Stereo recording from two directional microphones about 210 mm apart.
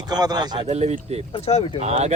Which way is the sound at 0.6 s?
30° right (ahead or behind).